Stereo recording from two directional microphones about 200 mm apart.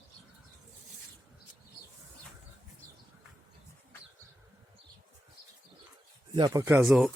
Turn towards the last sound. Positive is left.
turn(degrees=0)  # may be behind; listen again after turning